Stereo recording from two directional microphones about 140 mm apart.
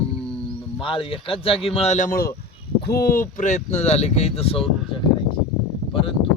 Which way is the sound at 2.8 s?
90° left.